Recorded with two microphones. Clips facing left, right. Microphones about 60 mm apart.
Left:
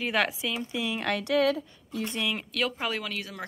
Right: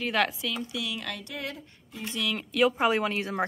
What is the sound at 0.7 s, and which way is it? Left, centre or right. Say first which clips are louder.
Speech: left 3 dB; left.